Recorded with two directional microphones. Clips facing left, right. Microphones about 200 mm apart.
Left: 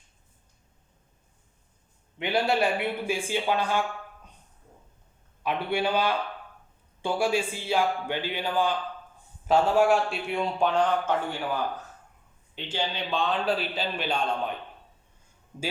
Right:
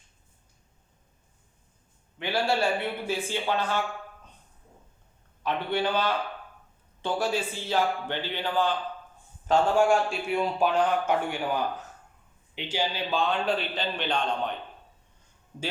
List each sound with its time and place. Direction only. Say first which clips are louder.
2.1 s a man's voice: left 2 dB; 20° left (ahead or behind)
5.4 s a man's voice: even; 10° left (ahead or behind)